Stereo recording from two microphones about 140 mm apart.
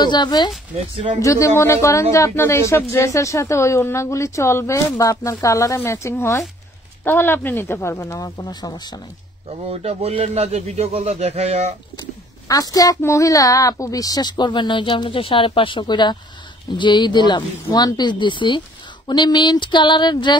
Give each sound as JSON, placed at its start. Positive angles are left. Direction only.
{"t": 0.0, "sound": "speech", "side_deg": 30}
{"t": 0.7, "sound": "a man's voice", "side_deg": -50}
{"t": 1.2, "sound": "speech", "side_deg": 20}
{"t": 9.7, "sound": "a man's voice", "side_deg": -45}
{"t": 12.4, "sound": "speech", "side_deg": 25}